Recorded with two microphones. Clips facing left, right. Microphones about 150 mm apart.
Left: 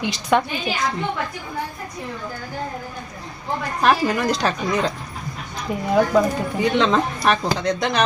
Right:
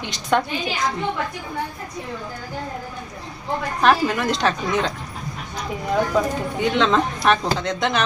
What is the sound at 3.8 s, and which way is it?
A woman's voice, centre (ahead or behind).